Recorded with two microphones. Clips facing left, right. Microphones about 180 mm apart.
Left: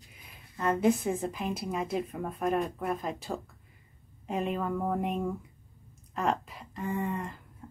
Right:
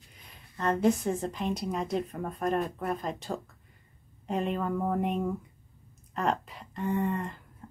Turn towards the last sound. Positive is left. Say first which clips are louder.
# right 3 dB
turn(degrees=0)  # may be behind; listen again after turning